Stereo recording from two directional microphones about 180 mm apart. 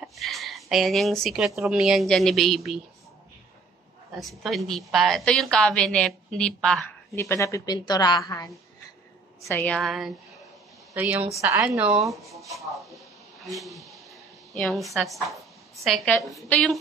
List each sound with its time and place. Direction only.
0.0 s a sound: centre (ahead or behind)
1.7 s a woman's voice: centre (ahead or behind)
4.2 s a woman's voice: centre (ahead or behind)
7.2 s a woman's voice: 15° left (ahead or behind)
9.5 s a woman's voice: 10° left (ahead or behind)